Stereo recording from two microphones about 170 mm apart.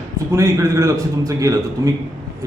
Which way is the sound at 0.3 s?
20° right (ahead or behind).